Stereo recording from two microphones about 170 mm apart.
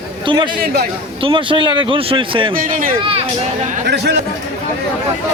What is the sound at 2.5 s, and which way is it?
Speech, 55° right (ahead or behind).